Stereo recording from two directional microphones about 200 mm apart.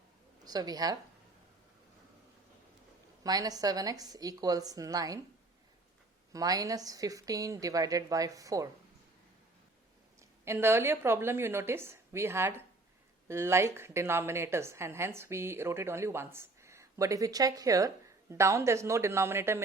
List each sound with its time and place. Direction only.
0.4 s a woman's voice: 20° right (ahead or behind)
3.2 s a woman's voice: 20° right (ahead or behind)
6.3 s a woman's voice: 20° right (ahead or behind)
10.2 s a woman's voice: 15° right (ahead or behind)